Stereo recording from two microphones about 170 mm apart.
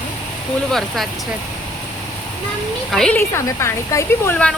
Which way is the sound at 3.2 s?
15° left (ahead or behind).